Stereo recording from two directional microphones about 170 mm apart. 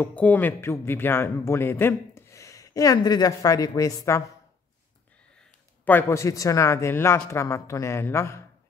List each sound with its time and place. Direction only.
0.0 s a man's voice: 10° left (ahead or behind)
5.9 s a man's voice: 15° left (ahead or behind)